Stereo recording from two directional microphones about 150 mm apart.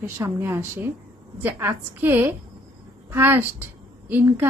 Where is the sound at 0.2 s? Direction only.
15° right (ahead or behind).